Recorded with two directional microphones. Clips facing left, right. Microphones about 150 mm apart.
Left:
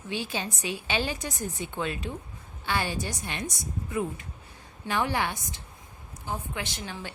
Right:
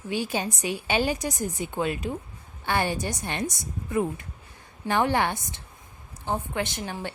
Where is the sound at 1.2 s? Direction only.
40° right (ahead or behind).